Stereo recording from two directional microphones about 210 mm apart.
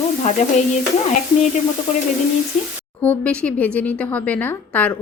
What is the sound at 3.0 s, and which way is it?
A woman's voice, 5° left (ahead or behind).